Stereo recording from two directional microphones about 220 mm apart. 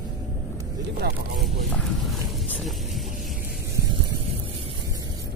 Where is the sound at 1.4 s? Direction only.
Centre (ahead or behind).